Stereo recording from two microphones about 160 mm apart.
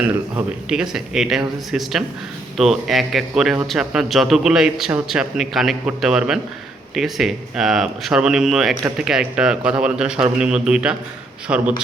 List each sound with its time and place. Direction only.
0.0 s a man's voice: 5° right (ahead or behind)